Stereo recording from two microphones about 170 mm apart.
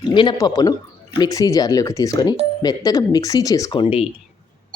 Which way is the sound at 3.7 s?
35° left (ahead or behind).